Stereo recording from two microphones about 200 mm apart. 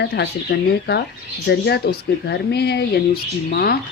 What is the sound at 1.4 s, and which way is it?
A woman's voice, 55° left (ahead or behind).